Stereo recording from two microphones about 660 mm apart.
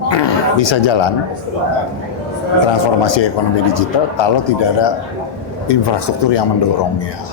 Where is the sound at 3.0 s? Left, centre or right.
Left.